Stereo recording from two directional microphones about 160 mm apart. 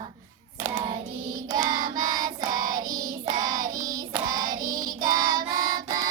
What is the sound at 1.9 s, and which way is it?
Child singing, 25° right (ahead or behind).